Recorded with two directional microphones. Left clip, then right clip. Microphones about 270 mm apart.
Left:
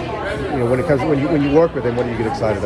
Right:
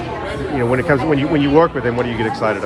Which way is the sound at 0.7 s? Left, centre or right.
Centre.